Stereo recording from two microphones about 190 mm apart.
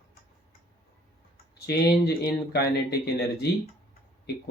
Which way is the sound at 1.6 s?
60° left (ahead or behind).